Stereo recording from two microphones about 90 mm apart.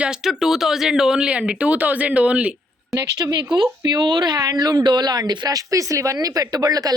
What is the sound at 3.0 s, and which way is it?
Speech, 45° right (ahead or behind).